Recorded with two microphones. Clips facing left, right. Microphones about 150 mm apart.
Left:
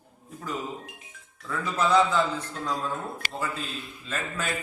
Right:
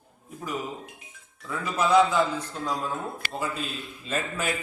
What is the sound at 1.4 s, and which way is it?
A man's voice, 10° right (ahead or behind).